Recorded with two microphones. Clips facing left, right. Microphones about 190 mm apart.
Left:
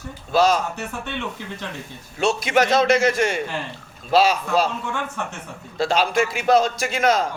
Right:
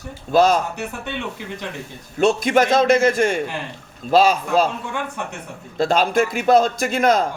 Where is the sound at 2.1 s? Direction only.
50° right (ahead or behind).